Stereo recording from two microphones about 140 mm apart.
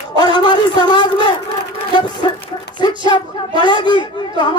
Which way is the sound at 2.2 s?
35° left (ahead or behind).